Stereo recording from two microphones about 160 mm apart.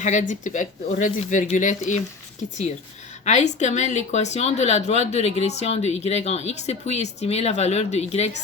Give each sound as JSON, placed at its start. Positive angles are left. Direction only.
{"t": 0.0, "sound": "speech", "side_deg": 50}
{"t": 3.2, "sound": "speech", "side_deg": 45}